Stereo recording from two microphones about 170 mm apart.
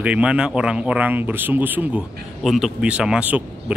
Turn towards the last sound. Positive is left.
turn(degrees=-5)  # may be behind; listen again after turning